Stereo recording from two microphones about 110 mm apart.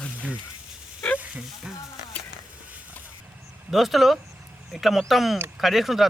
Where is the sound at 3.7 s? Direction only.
Centre (ahead or behind).